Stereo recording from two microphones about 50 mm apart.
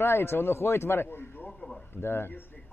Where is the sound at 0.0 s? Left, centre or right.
Left.